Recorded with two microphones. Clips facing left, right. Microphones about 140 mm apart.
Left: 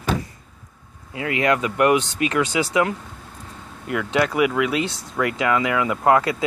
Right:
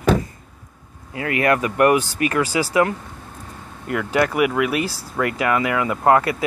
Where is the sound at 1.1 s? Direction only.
20° left (ahead or behind).